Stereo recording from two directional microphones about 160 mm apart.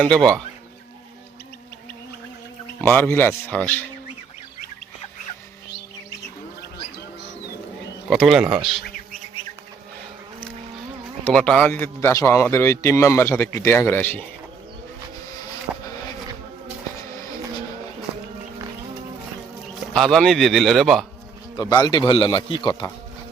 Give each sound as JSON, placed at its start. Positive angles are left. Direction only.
{"t": 2.8, "sound": "a man's voice", "side_deg": 15}
{"t": 8.1, "sound": "speech", "side_deg": 0}
{"t": 11.2, "sound": "a man's voice", "side_deg": 5}
{"t": 19.7, "sound": "speech", "side_deg": 0}
{"t": 21.5, "sound": "speech", "side_deg": 25}